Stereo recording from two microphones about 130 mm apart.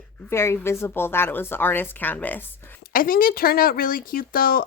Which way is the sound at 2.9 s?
90° left.